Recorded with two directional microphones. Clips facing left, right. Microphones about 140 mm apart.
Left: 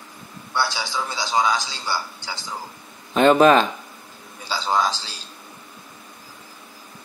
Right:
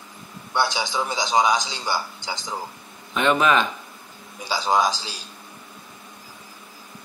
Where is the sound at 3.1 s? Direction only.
35° left (ahead or behind).